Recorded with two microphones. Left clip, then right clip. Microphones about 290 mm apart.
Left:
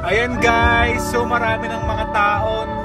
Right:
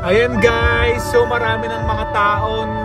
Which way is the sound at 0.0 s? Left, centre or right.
Centre.